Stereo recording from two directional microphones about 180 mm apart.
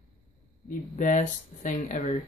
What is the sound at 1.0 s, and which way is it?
Speech, 45° left (ahead or behind).